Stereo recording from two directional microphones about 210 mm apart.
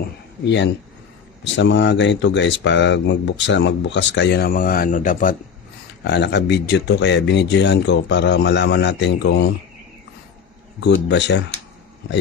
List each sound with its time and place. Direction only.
1.4 s speech: 60° left (ahead or behind); by 5.3 s 40° left (ahead or behind)
6.0 s speech: 55° left (ahead or behind)
10.8 s speech: 55° left (ahead or behind)